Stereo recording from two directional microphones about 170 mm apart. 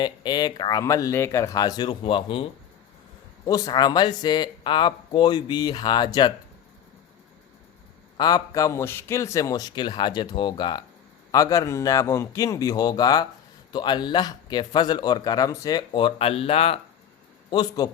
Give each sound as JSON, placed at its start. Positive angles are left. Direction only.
{"t": 0.0, "sound": "speech", "side_deg": 25}
{"t": 8.2, "sound": "speech", "side_deg": 20}
{"t": 17.5, "sound": "speech", "side_deg": 25}